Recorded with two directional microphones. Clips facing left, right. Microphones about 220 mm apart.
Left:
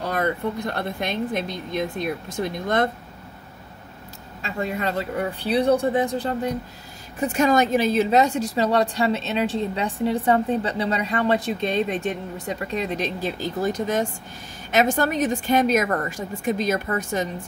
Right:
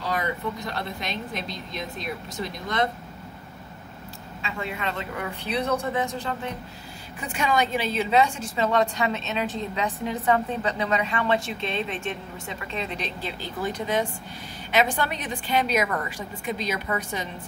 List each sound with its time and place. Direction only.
0.0 s speech: 55° left (ahead or behind)
4.4 s a woman's voice: 40° left (ahead or behind)